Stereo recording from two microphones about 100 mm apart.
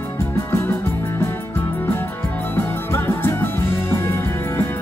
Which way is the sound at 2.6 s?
20° left (ahead or behind).